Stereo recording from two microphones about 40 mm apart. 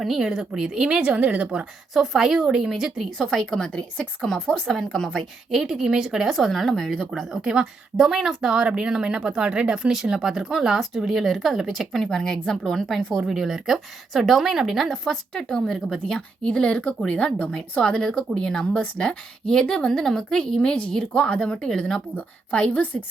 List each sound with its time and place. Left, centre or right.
0.2 s speech: centre; by 1.6 s right
1.9 s a woman's voice: centre
3.3 s a woman's voice: centre
3.7 s speech: left
4.7 s a woman's voice: centre
5.5 s a woman's voice: centre
6.3 s a woman's voice: centre
7.1 s a woman's voice: centre
9.9 s a woman's voice: centre
11.9 s a woman's voice: centre
13.1 s a woman's voice: centre
16.6 s a woman's voice: left
22.7 s a woman's voice: left